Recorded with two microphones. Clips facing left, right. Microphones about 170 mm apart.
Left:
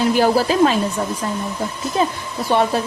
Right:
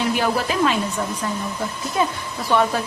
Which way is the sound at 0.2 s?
35° left (ahead or behind).